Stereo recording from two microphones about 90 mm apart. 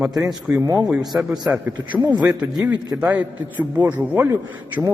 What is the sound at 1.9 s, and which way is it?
Speech, 55° right (ahead or behind).